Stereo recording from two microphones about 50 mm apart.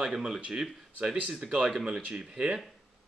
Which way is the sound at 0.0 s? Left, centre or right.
Centre.